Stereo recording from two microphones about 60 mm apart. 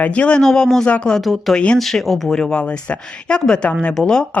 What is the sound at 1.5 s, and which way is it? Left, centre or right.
Speech, centre.